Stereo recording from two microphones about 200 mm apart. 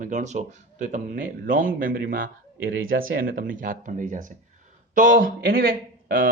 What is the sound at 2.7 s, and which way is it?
Speech, 80° right.